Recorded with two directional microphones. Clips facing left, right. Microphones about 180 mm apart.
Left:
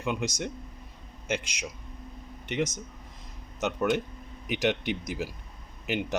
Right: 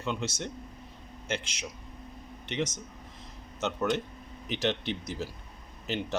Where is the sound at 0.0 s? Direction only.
10° left (ahead or behind).